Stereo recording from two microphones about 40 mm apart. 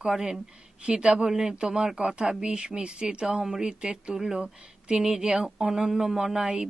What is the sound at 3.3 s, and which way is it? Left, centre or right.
Speech, centre.